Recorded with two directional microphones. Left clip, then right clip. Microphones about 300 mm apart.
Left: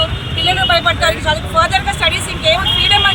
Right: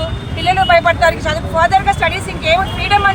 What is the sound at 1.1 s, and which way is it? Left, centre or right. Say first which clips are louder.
Speech: even; centre.